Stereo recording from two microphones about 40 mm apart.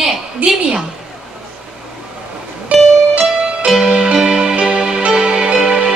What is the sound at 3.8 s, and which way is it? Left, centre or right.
Music, right.